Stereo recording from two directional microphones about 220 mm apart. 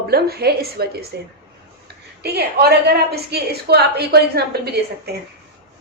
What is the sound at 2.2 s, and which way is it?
A woman's voice, 45° right (ahead or behind).